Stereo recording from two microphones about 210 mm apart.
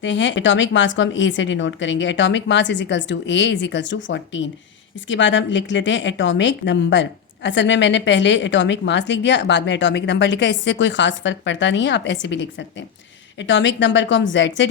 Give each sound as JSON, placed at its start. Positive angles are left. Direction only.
{"t": 0.0, "sound": "speech", "side_deg": 60}